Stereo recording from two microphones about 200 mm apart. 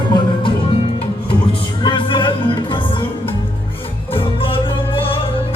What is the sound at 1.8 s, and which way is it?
Music, 25° left (ahead or behind).